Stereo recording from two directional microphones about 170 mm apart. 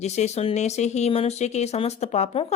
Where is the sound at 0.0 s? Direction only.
40° left (ahead or behind).